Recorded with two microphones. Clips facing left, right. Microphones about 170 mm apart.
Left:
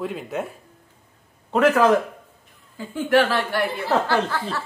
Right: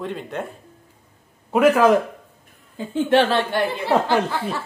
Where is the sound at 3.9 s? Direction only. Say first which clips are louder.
Right 2 dB; 10° right (ahead or behind).